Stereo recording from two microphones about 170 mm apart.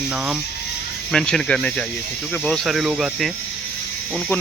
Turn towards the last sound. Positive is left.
turn(degrees=0)  # may be behind; listen again after turning